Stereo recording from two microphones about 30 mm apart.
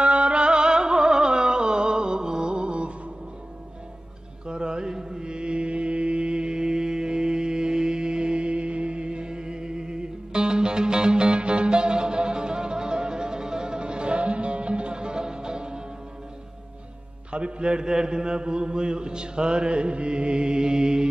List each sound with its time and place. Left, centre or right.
0.0 s music: right
4.5 s mantra: right
17.3 s mantra: right